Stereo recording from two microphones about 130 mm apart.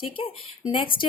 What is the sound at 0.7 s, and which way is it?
Speech, 40° left (ahead or behind).